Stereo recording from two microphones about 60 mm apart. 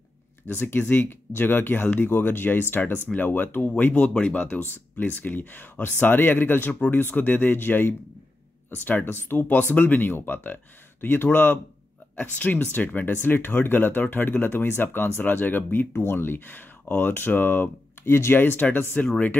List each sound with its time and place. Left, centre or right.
0.6 s speech: left
6.7 s speech: left
7.0 s speech: left